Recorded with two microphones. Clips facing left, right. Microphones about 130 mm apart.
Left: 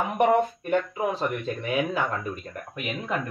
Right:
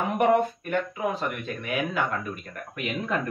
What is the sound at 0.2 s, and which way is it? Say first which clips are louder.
Speech: left 1 dB; 25° left (ahead or behind).